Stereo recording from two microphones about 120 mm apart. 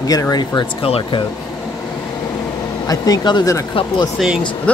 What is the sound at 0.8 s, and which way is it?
Speech, 45° left (ahead or behind).